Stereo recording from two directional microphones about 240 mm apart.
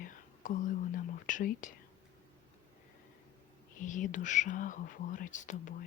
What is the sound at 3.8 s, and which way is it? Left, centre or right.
Speech, left.